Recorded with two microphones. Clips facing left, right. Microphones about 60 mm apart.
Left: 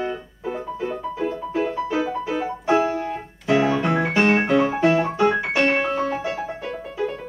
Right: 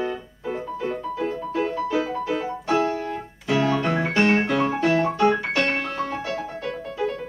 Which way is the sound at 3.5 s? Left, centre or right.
Centre.